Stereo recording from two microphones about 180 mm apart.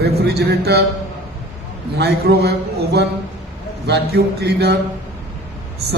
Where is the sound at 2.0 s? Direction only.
65° right (ahead or behind).